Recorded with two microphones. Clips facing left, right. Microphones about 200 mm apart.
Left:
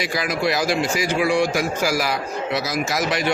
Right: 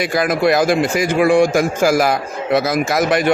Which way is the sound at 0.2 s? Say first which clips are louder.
Right 8 dB; 50° right (ahead or behind).